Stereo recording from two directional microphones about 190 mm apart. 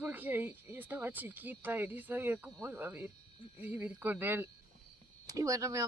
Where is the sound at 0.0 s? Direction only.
10° right (ahead or behind).